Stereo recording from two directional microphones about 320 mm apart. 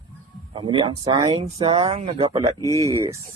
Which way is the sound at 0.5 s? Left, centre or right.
Centre.